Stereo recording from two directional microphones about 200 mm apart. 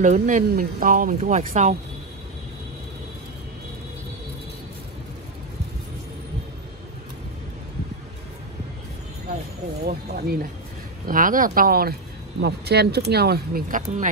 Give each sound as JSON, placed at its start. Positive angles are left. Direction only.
{"t": 0.0, "sound": "speech", "side_deg": -35}
{"t": 9.8, "sound": "speech", "side_deg": -50}